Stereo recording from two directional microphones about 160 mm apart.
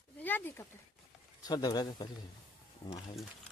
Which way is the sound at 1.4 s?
25° left (ahead or behind).